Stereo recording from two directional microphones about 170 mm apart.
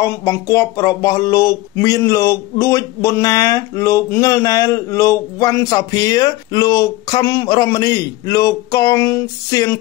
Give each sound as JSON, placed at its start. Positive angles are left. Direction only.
{"t": 0.0, "sound": "speech", "side_deg": 20}